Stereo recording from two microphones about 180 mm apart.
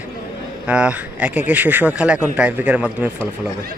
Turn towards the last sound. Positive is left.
turn(degrees=-10)  # may be behind; listen again after turning